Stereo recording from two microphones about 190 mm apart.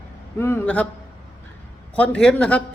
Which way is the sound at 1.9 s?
5° left (ahead or behind).